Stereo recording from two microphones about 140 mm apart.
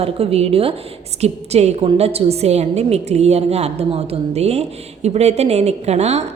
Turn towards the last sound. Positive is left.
turn(degrees=-50)  # may be behind; listen again after turning